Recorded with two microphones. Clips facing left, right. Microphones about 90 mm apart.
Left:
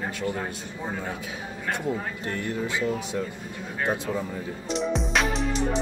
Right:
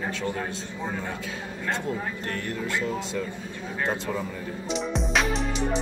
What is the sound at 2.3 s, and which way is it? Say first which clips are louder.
Speech: left 3 dB; 20° left (ahead or behind).